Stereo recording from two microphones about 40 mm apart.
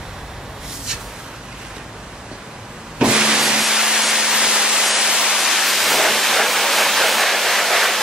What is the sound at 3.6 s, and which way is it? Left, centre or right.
Music, centre.